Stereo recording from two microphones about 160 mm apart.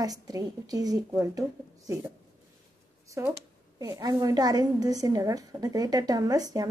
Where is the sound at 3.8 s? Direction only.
20° right (ahead or behind).